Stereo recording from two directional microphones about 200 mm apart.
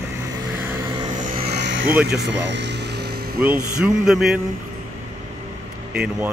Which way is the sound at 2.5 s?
60° right (ahead or behind).